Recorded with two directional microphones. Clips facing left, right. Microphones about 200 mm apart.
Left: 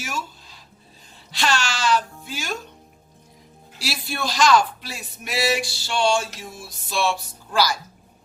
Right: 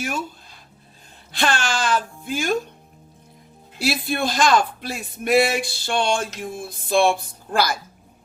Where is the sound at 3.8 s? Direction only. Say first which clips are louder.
Right 6 dB; 55° right (ahead or behind).